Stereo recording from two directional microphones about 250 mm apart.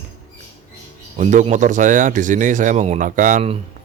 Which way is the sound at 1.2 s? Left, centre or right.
Right.